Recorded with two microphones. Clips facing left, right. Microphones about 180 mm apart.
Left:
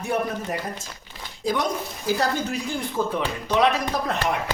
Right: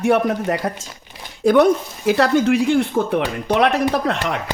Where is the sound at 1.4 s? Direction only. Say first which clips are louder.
Right 12 dB; 60° right (ahead or behind).